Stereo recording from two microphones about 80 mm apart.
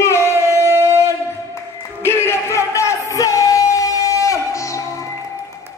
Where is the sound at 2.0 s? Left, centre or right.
Left.